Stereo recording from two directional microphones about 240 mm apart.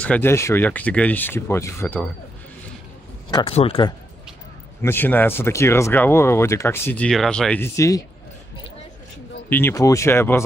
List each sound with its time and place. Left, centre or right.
0.0 s speech: centre
3.3 s speech: centre
4.8 s speech: centre
9.5 s speech: centre